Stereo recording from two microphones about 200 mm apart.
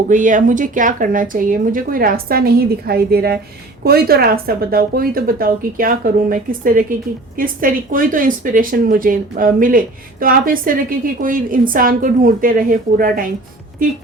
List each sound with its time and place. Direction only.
0.1 s speech: 40° right (ahead or behind)